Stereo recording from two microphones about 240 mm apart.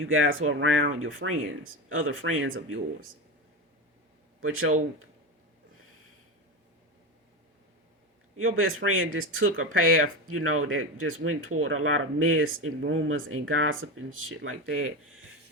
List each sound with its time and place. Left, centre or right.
0.0 s speech: right
4.4 s speech: right
8.4 s speech: right